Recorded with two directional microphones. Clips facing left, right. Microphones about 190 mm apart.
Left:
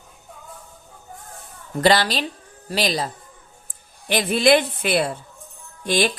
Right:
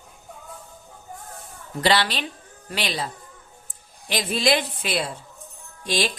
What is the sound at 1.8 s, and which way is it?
A woman's voice, 45° left (ahead or behind).